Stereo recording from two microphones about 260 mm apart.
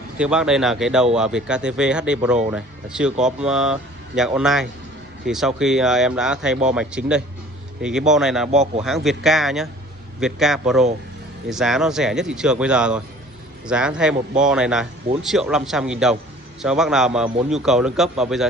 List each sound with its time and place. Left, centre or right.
0.2 s speech: centre
8.5 s speech: right
8.8 s speech: centre